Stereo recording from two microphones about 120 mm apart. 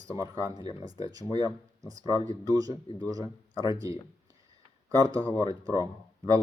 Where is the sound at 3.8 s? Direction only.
25° right (ahead or behind).